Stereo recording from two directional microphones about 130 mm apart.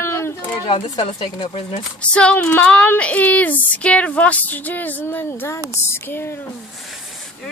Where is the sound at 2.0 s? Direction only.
10° left (ahead or behind).